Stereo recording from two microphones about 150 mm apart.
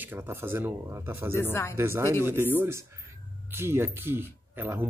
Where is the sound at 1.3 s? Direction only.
15° left (ahead or behind).